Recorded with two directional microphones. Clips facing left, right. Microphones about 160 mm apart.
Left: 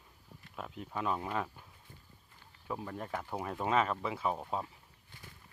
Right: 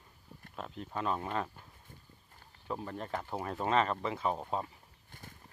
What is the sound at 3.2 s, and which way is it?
Speech, 10° right (ahead or behind).